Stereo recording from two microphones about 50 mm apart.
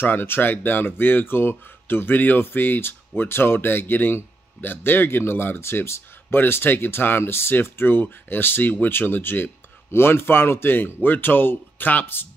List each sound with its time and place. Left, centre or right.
0.0 s speech: left
6.3 s speech: left